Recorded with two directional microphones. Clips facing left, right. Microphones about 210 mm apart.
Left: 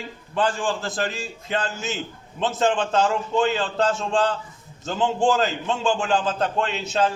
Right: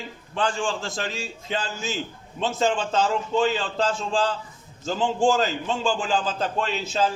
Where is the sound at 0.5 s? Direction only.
Centre (ahead or behind).